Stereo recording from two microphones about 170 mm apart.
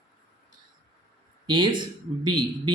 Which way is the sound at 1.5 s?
30° right (ahead or behind).